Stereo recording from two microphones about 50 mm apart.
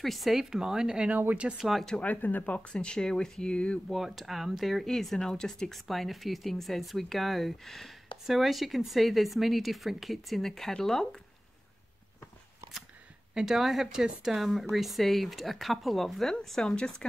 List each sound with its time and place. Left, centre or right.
0.0 s speech: centre
1.1 s speech: right
1.6 s speech: centre
2.0 s speech: left
3.9 s speech: centre
13.3 s speech: centre